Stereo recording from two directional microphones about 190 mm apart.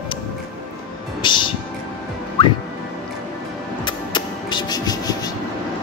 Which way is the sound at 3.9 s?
25° left (ahead or behind).